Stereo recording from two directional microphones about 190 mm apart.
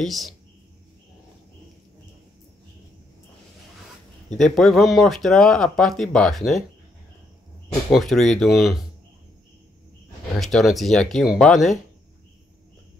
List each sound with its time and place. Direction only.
0.0 s speech: centre (ahead or behind)
4.4 s speech: centre (ahead or behind)
7.9 s speech: centre (ahead or behind)
10.4 s speech: centre (ahead or behind)